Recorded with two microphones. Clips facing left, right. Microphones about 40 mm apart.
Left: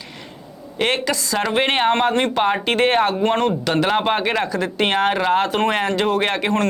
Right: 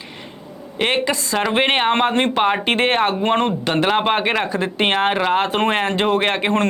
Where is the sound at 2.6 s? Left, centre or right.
Right.